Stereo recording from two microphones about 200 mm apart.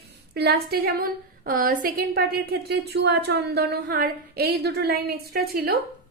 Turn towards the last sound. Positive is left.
turn(degrees=-50)  # may be behind; listen again after turning